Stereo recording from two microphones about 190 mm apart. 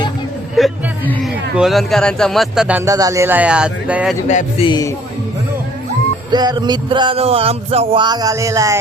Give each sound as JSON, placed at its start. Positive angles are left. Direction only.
{"t": 0.5, "sound": "speech", "side_deg": 0}
{"t": 4.3, "sound": "speech", "side_deg": 35}
{"t": 6.3, "sound": "a sound", "side_deg": -20}